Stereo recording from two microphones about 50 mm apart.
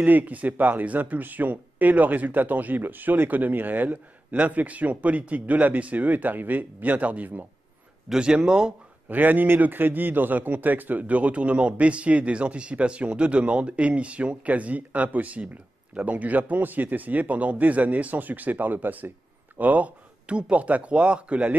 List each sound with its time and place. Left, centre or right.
0.0 s speech: right
8.1 s speech: centre
9.1 s speech: right
19.6 s speech: right